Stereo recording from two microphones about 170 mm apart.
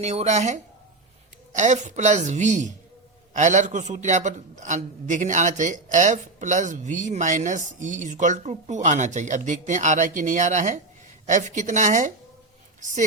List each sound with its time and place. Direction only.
0.0 s a man's voice: 40° right (ahead or behind)